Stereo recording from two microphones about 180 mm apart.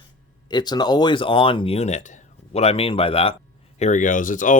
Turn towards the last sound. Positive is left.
turn(degrees=45)  # may be behind; listen again after turning